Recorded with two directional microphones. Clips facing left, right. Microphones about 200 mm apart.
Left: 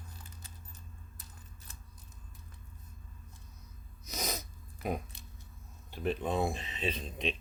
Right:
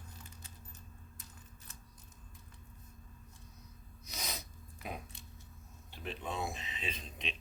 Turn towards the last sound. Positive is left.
turn(degrees=35)  # may be behind; listen again after turning